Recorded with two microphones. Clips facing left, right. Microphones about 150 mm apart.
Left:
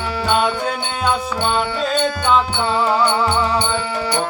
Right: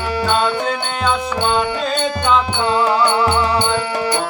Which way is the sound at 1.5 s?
15° right (ahead or behind).